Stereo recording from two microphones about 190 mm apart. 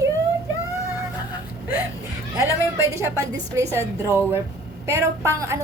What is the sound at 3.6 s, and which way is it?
A woman's voice, 15° right (ahead or behind).